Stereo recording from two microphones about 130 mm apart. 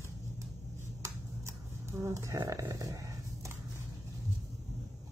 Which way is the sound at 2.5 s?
25° right (ahead or behind).